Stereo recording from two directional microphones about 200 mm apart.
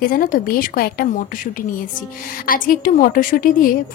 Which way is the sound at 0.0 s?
45° left (ahead or behind).